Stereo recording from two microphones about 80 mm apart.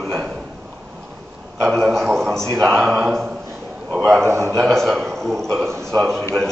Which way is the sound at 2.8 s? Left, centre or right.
Centre.